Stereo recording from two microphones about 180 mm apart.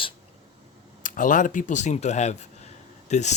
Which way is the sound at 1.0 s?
45° left (ahead or behind).